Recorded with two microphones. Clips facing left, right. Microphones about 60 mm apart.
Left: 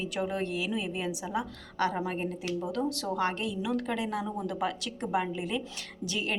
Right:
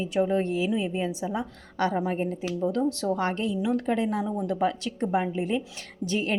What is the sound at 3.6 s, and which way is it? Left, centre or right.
A woman's voice, right.